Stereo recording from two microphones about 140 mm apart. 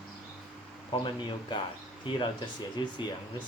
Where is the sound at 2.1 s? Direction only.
35° left (ahead or behind).